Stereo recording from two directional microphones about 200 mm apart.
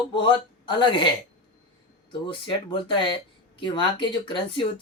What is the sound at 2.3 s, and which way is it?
Speech, 25° left (ahead or behind).